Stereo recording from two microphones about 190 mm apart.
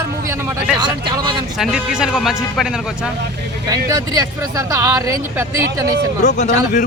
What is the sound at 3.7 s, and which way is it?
Speech, 20° right (ahead or behind).